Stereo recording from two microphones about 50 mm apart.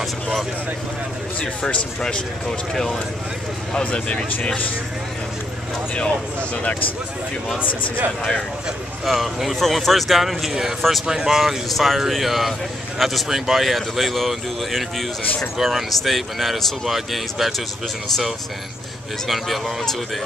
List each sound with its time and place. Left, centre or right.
0.0 s speech: centre
1.4 s speech: left; by 3.0 s centre
3.8 s speech: left
5.9 s speech: left
9.0 s speech: centre
11.1 s speech: centre
19.2 s speech: centre